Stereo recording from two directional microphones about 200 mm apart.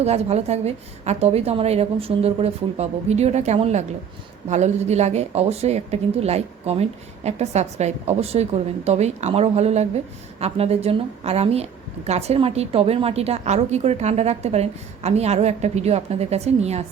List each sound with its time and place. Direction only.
0.0 s a woman's voice: 30° right (ahead or behind)